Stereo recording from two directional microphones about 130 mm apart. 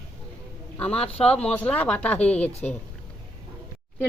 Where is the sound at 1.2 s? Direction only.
10° left (ahead or behind).